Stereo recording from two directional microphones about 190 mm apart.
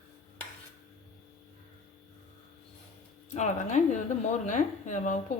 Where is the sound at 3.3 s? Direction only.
40° left (ahead or behind).